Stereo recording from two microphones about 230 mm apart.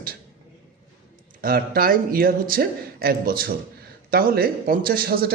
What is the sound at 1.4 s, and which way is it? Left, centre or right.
Speech, right.